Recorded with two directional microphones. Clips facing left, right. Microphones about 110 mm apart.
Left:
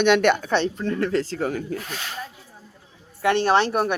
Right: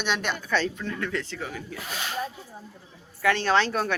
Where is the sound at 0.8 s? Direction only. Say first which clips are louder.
Left 8 dB; 35° left (ahead or behind).